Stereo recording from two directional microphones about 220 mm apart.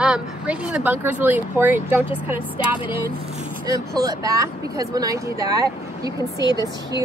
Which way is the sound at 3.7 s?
15° right (ahead or behind).